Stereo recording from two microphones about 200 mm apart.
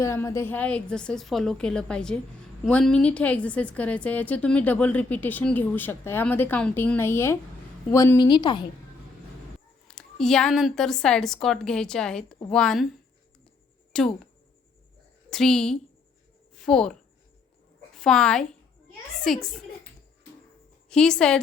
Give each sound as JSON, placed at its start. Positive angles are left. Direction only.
{"t": 0.0, "sound": "a woman's voice", "side_deg": 15}
{"t": 9.8, "sound": "a woman's voice", "side_deg": 5}
{"t": 13.9, "sound": "a woman's voice", "side_deg": 5}
{"t": 15.3, "sound": "a woman's voice", "side_deg": 5}
{"t": 20.9, "sound": "a woman's voice", "side_deg": 5}